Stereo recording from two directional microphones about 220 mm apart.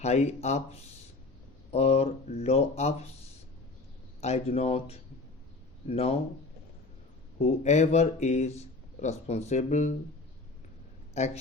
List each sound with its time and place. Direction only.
0.0 s speech: 30° left (ahead or behind)
4.2 s speech: 30° left (ahead or behind)
7.3 s speech: 30° left (ahead or behind)
11.2 s speech: 30° left (ahead or behind)